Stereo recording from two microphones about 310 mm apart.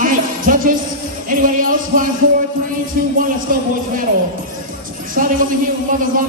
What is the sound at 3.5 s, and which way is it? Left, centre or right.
Speech, right.